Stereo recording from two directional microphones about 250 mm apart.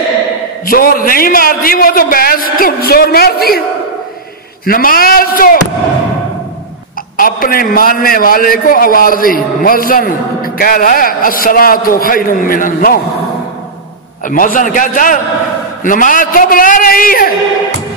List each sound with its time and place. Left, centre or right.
0.7 s a man's voice: left
4.6 s a man's voice: left
7.2 s a man's voice: left
14.2 s a man's voice: left